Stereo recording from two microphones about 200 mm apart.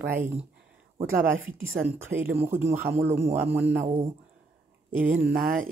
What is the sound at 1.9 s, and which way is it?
Speech, 10° right (ahead or behind).